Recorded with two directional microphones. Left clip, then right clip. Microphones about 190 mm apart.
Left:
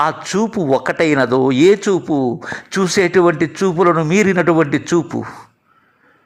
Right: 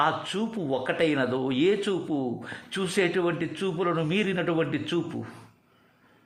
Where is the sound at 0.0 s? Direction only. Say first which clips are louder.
Left 9 dB; 35° left (ahead or behind).